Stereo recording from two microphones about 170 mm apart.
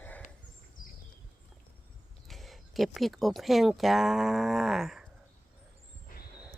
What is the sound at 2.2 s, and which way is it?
Speech, centre (ahead or behind).